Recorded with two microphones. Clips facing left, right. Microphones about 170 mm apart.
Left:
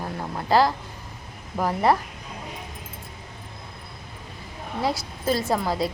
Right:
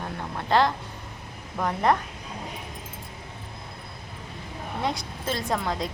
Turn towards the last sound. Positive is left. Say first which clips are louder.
# left 4 dB
turn(degrees=5)  # may be behind; listen again after turning